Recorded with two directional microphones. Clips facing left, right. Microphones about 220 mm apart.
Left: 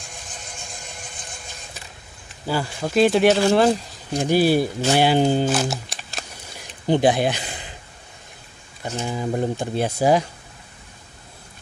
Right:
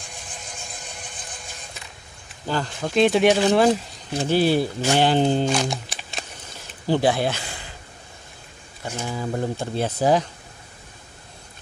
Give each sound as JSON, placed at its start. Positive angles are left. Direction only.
{"t": 2.4, "sound": "speech", "side_deg": 10}
{"t": 4.2, "sound": "speech", "side_deg": 10}
{"t": 6.6, "sound": "a sound", "side_deg": 20}
{"t": 9.1, "sound": "speech", "side_deg": 15}